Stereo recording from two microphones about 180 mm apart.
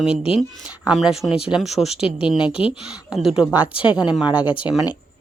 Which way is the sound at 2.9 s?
5° right (ahead or behind).